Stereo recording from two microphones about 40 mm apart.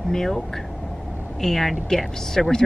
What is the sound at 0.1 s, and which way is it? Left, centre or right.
Speech, centre.